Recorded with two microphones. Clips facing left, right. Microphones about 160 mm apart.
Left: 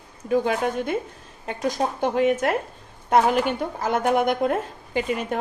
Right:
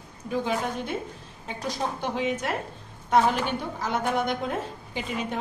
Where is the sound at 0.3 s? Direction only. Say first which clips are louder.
Left 6 dB; 55° left (ahead or behind).